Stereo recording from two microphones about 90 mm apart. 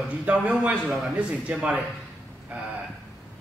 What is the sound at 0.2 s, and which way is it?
Speech, 15° right (ahead or behind).